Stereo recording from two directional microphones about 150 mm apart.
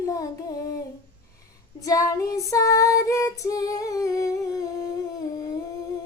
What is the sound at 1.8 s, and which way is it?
Female singing, 25° left (ahead or behind).